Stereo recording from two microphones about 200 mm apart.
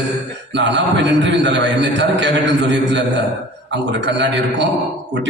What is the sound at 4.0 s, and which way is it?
Speech, 60° right (ahead or behind).